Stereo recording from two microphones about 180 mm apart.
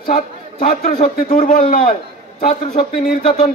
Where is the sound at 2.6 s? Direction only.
35° left (ahead or behind).